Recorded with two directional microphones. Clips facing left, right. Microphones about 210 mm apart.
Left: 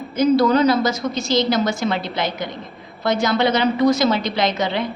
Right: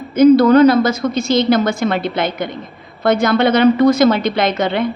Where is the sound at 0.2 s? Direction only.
55° right (ahead or behind).